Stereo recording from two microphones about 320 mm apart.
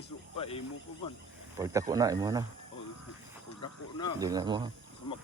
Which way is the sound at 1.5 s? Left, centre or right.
Centre.